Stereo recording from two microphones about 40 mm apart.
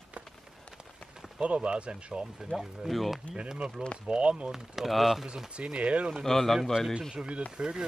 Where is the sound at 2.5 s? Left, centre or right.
Centre.